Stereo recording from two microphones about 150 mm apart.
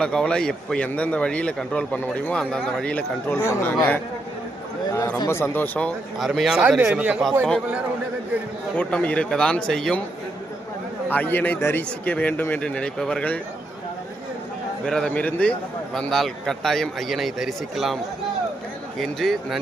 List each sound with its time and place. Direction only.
0.0 s a man's voice: 5° left (ahead or behind)
4.9 s a man's voice: 25° left (ahead or behind)
6.1 s a man's voice: centre (ahead or behind)
8.7 s a man's voice: 10° left (ahead or behind)
11.1 s a man's voice: 10° left (ahead or behind)
14.8 s a man's voice: 5° left (ahead or behind)